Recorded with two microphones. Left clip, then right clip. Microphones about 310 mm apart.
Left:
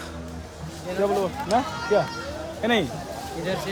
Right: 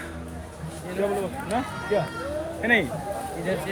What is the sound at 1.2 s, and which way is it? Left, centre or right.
Speech, centre.